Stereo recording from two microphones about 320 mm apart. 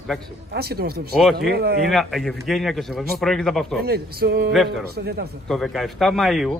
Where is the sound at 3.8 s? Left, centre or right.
Right.